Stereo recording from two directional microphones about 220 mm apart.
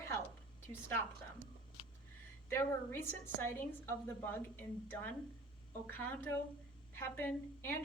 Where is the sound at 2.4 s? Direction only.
10° left (ahead or behind).